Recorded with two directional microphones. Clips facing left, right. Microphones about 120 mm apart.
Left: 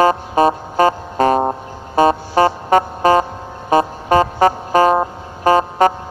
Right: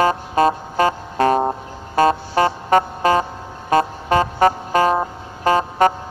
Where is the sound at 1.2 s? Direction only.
10° left (ahead or behind).